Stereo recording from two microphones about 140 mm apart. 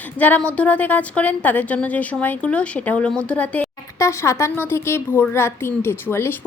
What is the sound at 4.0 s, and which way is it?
A woman's voice, 20° left (ahead or behind).